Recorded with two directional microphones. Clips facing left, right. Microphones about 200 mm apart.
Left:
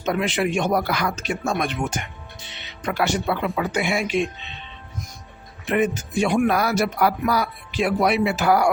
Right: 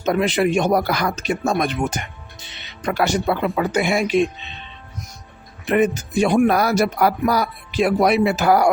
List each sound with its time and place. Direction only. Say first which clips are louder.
0.0 s speech: right 4 dB; 40° right (ahead or behind)
5.6 s speech: right 4 dB; 40° right (ahead or behind)